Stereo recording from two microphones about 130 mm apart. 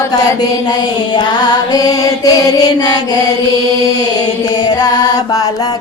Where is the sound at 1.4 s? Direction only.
30° left (ahead or behind).